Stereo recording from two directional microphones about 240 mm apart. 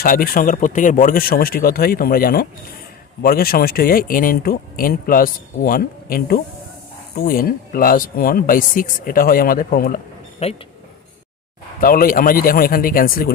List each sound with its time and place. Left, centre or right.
0.0 s speech: left
10.4 s speech: left
11.8 s speech: left